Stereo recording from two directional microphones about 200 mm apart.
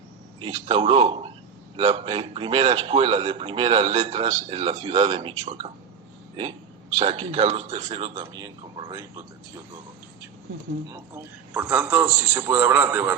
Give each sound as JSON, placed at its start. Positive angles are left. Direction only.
{"t": 0.3, "sound": "a man's voice", "side_deg": -30}
{"t": 6.9, "sound": "a man's voice", "side_deg": -30}
{"t": 10.9, "sound": "a man's voice", "side_deg": -15}